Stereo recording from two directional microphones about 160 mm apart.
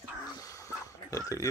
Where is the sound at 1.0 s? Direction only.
20° left (ahead or behind).